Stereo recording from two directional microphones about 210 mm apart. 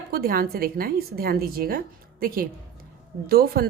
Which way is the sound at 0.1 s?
45° right (ahead or behind).